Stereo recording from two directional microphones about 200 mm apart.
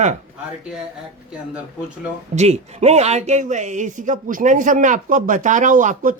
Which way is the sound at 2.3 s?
35° right (ahead or behind).